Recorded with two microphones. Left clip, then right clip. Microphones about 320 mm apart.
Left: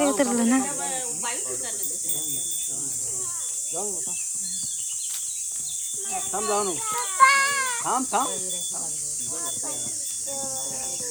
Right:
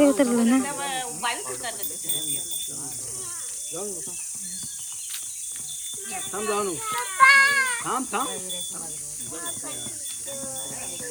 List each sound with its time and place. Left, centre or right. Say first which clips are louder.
0.0 s snake: right 3 dB; centre
6.1 s speech: left 1 dB; centre